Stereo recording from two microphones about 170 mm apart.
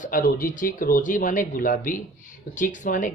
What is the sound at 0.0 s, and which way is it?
Speech, 55° left (ahead or behind).